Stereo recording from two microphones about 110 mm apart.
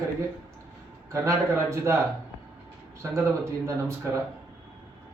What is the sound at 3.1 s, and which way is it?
Speech, 25° right (ahead or behind).